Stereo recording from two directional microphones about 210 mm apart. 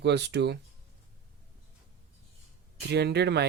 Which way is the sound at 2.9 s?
50° right (ahead or behind).